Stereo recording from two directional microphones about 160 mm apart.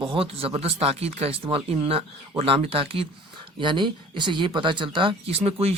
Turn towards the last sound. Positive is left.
turn(degrees=-40)  # may be behind; listen again after turning